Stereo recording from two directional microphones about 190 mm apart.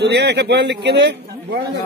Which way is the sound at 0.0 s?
65° right (ahead or behind).